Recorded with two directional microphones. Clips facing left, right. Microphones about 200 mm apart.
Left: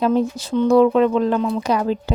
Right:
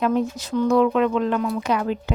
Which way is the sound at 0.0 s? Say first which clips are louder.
Left 3 dB; 30° left (ahead or behind).